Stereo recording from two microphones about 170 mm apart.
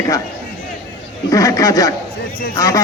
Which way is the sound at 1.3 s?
20° left (ahead or behind).